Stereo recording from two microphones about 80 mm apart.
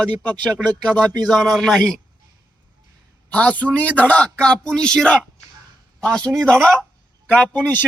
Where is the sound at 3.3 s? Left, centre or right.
Centre.